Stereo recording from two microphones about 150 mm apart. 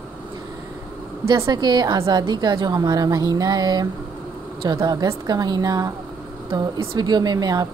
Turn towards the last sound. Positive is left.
turn(degrees=-25)  # may be behind; listen again after turning